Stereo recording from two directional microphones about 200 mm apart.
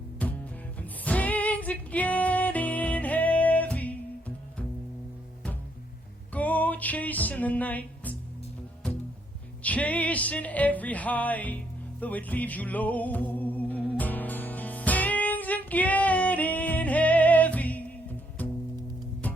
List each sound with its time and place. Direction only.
0.2 s music: 5° left (ahead or behind)
6.3 s music: 10° left (ahead or behind)